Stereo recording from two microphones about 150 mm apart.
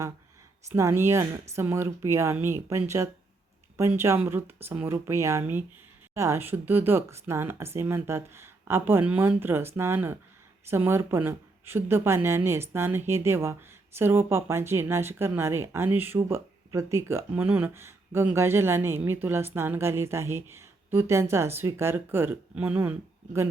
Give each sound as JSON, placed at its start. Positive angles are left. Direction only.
{"t": 0.8, "sound": "a woman's voice", "side_deg": -20}